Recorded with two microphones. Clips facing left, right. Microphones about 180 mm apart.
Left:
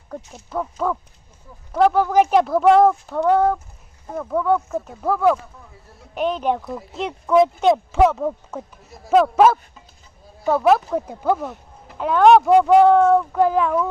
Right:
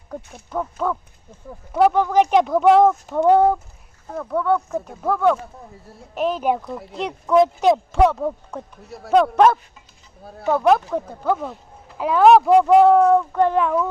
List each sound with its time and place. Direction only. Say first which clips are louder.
0.5 s speech: even; centre (ahead or behind)
2.0 s speech: even; 10° left (ahead or behind)
3.2 s speech: right 3 dB; 20° right (ahead or behind)
4.1 s speech: left 1 dB; 5° left (ahead or behind)
11.9 s speech: even; centre (ahead or behind)